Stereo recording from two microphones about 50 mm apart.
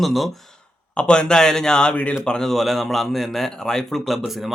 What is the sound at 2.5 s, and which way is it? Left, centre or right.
A man's voice, centre.